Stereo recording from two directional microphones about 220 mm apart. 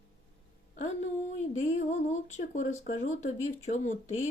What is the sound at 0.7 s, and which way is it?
Speech, 30° left (ahead or behind).